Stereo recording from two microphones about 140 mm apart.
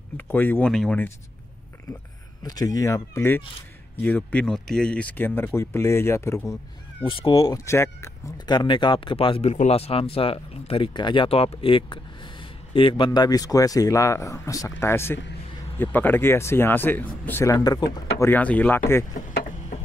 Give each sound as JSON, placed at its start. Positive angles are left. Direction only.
{"t": 0.2, "sound": "speech", "side_deg": 15}
{"t": 2.4, "sound": "speech", "side_deg": 25}
{"t": 7.1, "sound": "speech", "side_deg": 40}
{"t": 7.5, "sound": "speech", "side_deg": 20}
{"t": 8.5, "sound": "speech", "side_deg": 35}
{"t": 9.5, "sound": "speech", "side_deg": 50}
{"t": 18.3, "sound": "speech", "side_deg": 10}